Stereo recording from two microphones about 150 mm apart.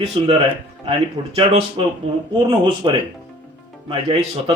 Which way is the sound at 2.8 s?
30° right (ahead or behind).